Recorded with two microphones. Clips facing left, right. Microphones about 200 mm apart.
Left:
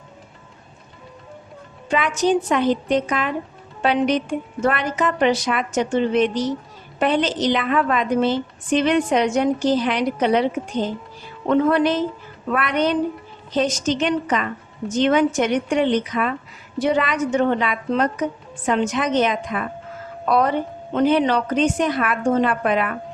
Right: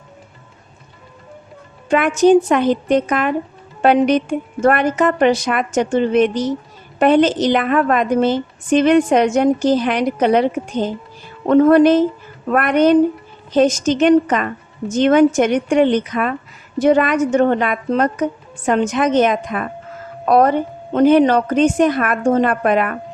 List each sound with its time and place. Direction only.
1.9 s a woman's voice: 50° right (ahead or behind)